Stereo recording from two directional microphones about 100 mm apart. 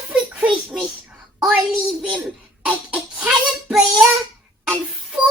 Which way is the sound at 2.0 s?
10° right (ahead or behind).